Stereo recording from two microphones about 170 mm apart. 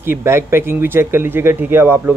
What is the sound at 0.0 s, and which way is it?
Speech, 15° right (ahead or behind).